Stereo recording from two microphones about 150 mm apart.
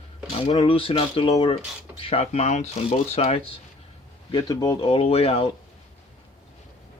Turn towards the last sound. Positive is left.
turn(degrees=40)  # may be behind; listen again after turning